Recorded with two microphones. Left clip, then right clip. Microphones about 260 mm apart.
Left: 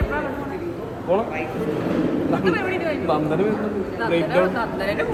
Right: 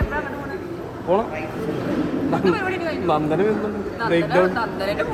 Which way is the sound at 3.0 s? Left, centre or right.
Right.